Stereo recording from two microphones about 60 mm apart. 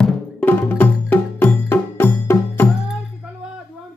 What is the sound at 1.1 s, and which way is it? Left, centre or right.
Music, left.